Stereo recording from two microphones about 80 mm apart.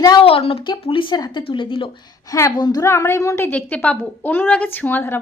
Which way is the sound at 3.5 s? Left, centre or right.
Centre.